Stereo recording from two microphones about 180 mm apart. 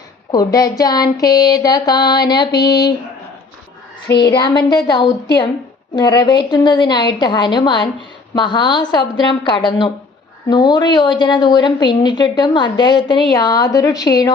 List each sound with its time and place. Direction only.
0.3 s a woman's voice: 20° left (ahead or behind)
4.2 s a woman's voice: 25° left (ahead or behind)